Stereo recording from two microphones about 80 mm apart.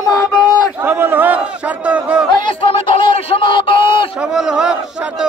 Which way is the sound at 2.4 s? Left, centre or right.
Left.